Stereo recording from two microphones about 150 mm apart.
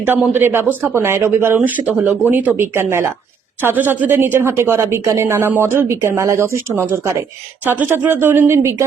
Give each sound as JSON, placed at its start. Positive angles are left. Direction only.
{"t": 0.0, "sound": "a woman's voice", "side_deg": -15}